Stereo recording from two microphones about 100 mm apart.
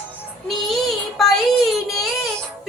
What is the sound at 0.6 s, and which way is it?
Child singing, centre (ahead or behind).